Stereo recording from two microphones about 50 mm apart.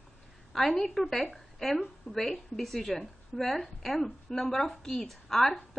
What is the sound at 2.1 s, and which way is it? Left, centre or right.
A woman's voice, centre.